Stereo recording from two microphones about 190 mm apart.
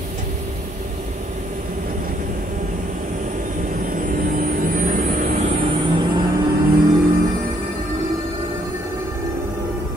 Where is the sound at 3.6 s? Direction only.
45° right (ahead or behind).